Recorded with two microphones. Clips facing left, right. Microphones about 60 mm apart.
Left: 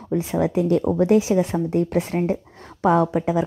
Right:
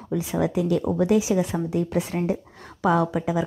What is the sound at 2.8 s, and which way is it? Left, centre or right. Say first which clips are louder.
Speech: left 3 dB; left.